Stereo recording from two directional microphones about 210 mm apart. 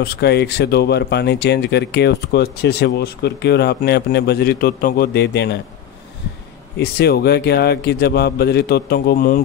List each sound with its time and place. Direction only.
0.0 s speech: 55° left (ahead or behind)
6.8 s speech: 50° left (ahead or behind)